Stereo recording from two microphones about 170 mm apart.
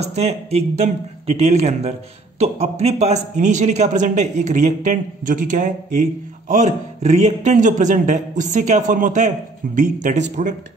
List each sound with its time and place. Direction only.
0.0 s a man's voice: 40° right (ahead or behind)